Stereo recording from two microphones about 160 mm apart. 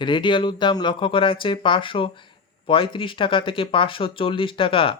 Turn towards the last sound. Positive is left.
turn(degrees=35)  # may be behind; listen again after turning